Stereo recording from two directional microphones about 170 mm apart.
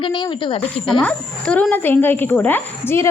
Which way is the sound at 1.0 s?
5° left (ahead or behind).